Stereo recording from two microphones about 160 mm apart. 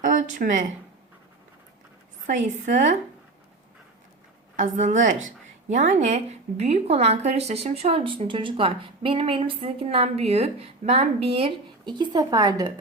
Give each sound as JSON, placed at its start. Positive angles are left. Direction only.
{"t": 0.0, "sound": "a sound", "side_deg": -50}
{"t": 2.2, "sound": "a woman's voice", "side_deg": -50}
{"t": 4.5, "sound": "a woman's voice", "side_deg": -50}